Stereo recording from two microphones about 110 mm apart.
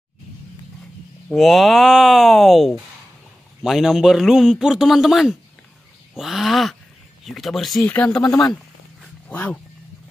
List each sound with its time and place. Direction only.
1.3 s a man's voice: centre (ahead or behind)
7.8 s speech: 15° left (ahead or behind)
8.2 s speech: 35° left (ahead or behind)
9.3 s speech: 15° left (ahead or behind)